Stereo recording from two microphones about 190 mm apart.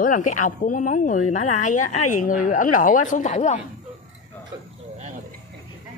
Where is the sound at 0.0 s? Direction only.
45° left (ahead or behind).